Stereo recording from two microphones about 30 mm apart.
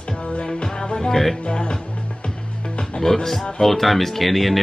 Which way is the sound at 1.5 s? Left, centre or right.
Left.